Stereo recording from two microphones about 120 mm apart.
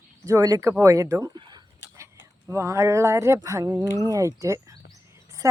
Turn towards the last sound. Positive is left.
turn(degrees=-25)  # may be behind; listen again after turning